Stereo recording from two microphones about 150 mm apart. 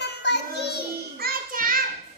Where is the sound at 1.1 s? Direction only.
75° right (ahead or behind).